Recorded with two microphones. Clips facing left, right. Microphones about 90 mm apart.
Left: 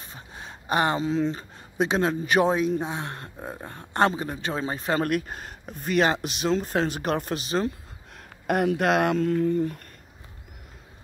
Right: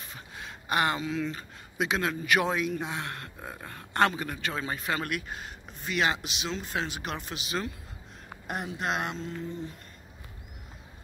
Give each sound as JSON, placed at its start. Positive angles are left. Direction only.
{"t": 0.0, "sound": "speech", "side_deg": 30}
{"t": 8.5, "sound": "speech", "side_deg": 65}